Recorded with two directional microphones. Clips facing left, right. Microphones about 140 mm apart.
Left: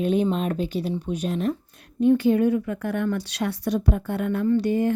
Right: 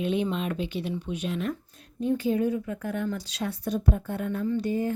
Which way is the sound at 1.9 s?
70° left (ahead or behind).